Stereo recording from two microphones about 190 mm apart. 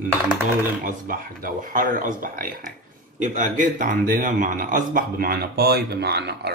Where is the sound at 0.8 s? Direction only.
45° right (ahead or behind).